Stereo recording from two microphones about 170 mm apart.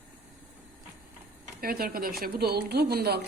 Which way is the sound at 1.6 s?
60° right (ahead or behind).